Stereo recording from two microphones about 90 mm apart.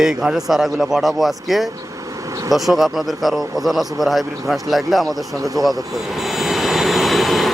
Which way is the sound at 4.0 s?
Centre (ahead or behind).